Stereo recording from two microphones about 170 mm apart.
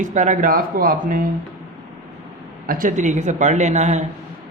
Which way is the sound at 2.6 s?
55° right (ahead or behind).